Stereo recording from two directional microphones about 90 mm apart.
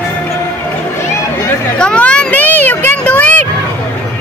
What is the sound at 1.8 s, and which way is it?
Speech, 10° left (ahead or behind).